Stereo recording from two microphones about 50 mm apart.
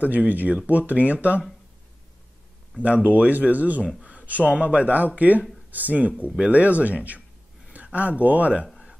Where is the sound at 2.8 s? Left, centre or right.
Right.